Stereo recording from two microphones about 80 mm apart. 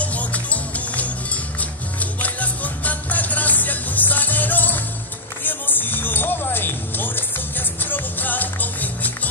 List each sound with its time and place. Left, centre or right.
0.0 s music: centre